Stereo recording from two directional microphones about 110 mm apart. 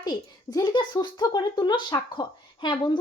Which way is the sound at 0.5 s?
45° left (ahead or behind).